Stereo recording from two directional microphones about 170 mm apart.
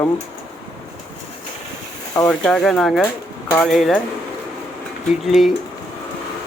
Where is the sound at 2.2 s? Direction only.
5° left (ahead or behind).